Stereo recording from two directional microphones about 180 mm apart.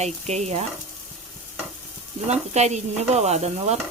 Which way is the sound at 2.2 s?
40° right (ahead or behind).